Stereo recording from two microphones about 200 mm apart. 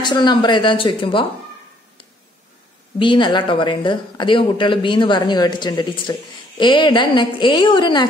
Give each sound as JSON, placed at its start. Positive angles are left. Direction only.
{"t": 0.0, "sound": "speech", "side_deg": 20}
{"t": 3.0, "sound": "speech", "side_deg": 25}